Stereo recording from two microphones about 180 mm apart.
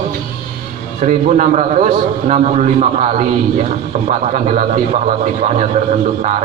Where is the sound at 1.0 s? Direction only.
40° right (ahead or behind).